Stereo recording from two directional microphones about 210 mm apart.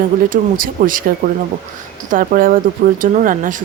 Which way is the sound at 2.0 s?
40° right (ahead or behind).